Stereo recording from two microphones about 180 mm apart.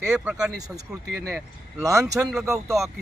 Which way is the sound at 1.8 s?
20° right (ahead or behind).